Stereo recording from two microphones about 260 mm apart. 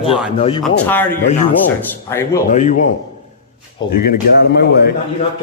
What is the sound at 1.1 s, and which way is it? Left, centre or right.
Speech, left.